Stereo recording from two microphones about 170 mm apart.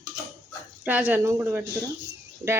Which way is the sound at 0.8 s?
10° right (ahead or behind).